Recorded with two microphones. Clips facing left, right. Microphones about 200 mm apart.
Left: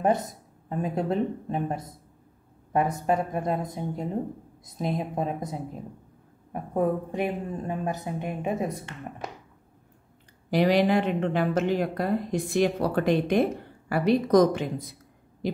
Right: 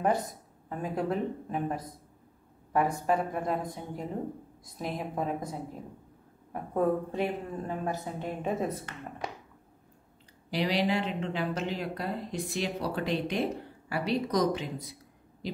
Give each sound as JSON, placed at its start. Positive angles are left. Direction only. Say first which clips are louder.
{"t": 0.0, "sound": "a woman's voice", "louder": "left 4 dB", "side_deg": 20}
{"t": 4.6, "sound": "a woman's voice", "louder": "left 6 dB", "side_deg": 20}
{"t": 10.5, "sound": "speech", "louder": "left 7 dB", "side_deg": 50}